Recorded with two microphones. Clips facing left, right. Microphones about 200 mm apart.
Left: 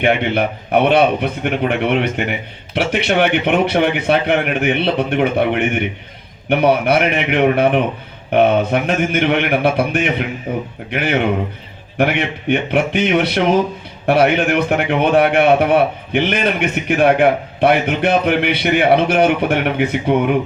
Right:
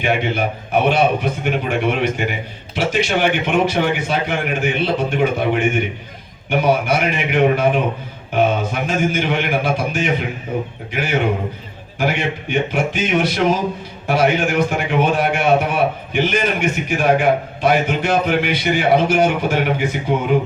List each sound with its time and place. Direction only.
0.0 s a man's voice: 60° left (ahead or behind)